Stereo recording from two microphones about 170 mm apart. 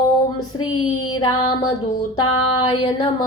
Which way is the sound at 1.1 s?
25° left (ahead or behind).